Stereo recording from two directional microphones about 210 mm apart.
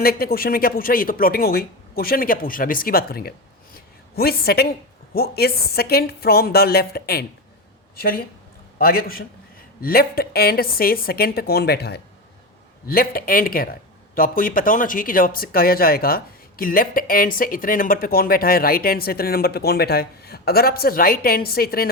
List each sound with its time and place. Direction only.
0.0 s speech: 45° left (ahead or behind)